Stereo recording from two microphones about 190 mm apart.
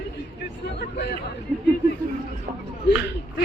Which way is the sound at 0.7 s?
60° left (ahead or behind).